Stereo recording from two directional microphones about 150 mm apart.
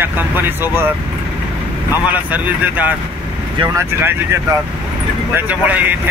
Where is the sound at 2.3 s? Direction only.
10° right (ahead or behind).